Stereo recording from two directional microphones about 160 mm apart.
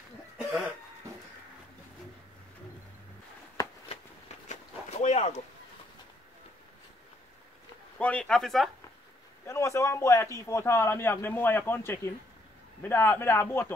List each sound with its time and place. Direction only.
4.5 s a sound: 45° left (ahead or behind)
8.0 s speech: 5° left (ahead or behind)
9.5 s a man's voice: 20° left (ahead or behind)